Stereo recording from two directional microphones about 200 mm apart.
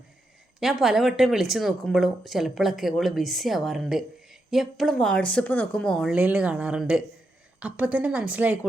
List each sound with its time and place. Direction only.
0.6 s speech: centre (ahead or behind)